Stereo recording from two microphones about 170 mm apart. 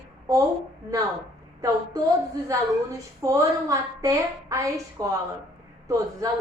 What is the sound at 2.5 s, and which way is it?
A woman's voice, 20° right (ahead or behind).